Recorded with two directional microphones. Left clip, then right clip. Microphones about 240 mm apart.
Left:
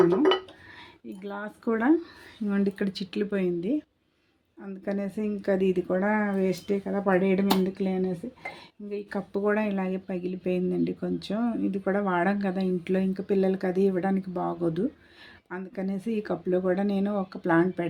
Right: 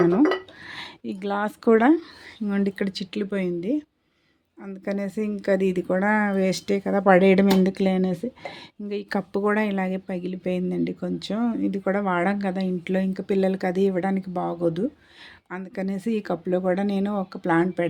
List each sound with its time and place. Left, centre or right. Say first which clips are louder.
0.7 s speech: right 9 dB; right
2.5 s speech: right 2 dB; right